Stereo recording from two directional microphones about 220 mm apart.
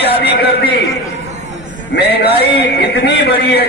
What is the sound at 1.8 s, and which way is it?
A man's voice, 45° left (ahead or behind).